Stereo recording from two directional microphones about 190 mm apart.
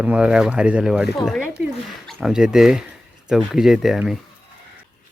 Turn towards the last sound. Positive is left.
turn(degrees=0)  # may be behind; listen again after turning